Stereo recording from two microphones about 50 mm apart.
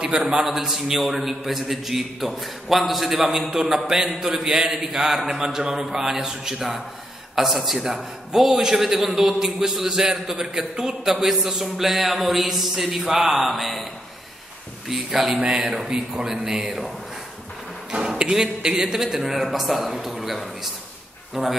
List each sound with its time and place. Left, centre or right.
0.0 s a man's voice: centre
14.9 s a man's voice: centre
15.3 s a man's voice: centre
18.0 s a man's voice: centre